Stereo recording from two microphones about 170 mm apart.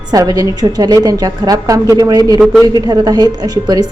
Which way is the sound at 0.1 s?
20° right (ahead or behind).